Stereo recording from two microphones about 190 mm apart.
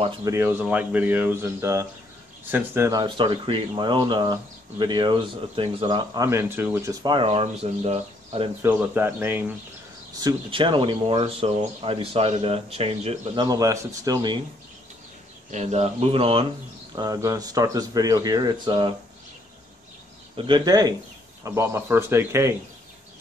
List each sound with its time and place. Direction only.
0.2 s speech: 15° right (ahead or behind)
3.0 s speech: 25° right (ahead or behind)
8.6 s speech: 10° right (ahead or behind)
10.1 s speech: 25° right (ahead or behind)
15.5 s speech: 35° right (ahead or behind)
16.9 s speech: 20° right (ahead or behind)
20.3 s speech: 25° right (ahead or behind)